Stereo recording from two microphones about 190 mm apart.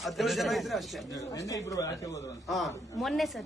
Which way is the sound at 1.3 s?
15° left (ahead or behind).